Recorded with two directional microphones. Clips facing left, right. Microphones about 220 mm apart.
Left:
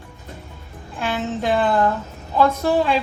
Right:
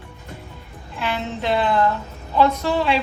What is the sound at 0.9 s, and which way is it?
A woman's voice, 45° left (ahead or behind).